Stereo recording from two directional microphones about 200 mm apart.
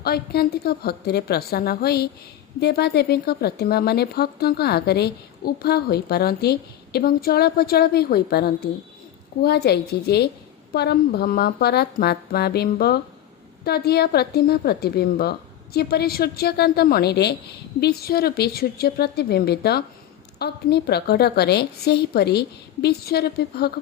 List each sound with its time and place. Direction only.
0.0 s a woman's voice: 50° left (ahead or behind)